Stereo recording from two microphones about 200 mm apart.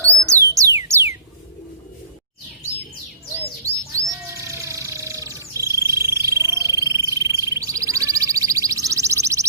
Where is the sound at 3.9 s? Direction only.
15° right (ahead or behind).